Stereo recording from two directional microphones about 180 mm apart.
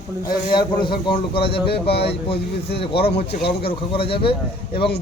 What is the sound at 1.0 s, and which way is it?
A man's voice, 30° left (ahead or behind).